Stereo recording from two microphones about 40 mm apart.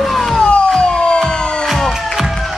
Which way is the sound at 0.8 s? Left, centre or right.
Left.